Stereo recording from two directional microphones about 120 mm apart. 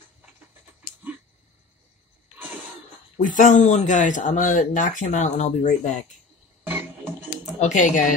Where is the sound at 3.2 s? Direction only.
90° left.